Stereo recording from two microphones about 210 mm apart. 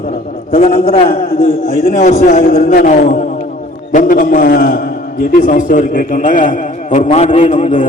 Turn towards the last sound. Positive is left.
turn(degrees=35)  # may be behind; listen again after turning